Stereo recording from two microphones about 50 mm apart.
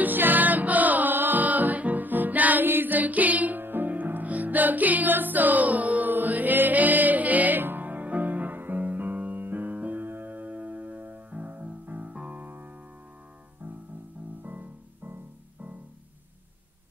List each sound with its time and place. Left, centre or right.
0.0 s music: right
12.4 s music: right
14.4 s music: right